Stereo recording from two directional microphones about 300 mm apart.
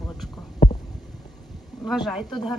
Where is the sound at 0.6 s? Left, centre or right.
Centre.